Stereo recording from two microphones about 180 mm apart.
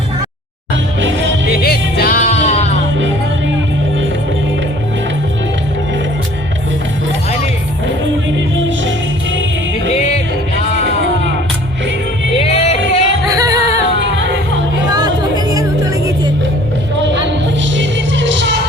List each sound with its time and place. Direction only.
0.9 s music: 90° right
1.5 s music: 60° left (ahead or behind); by 2.6 s 35° left (ahead or behind)
12.4 s music: 35° left (ahead or behind)
13.3 s music: 20° right (ahead or behind)
14.9 s music: 20° right (ahead or behind)
17.0 s music: 85° right